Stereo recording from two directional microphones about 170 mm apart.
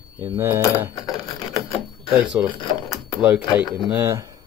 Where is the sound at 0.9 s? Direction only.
20° left (ahead or behind).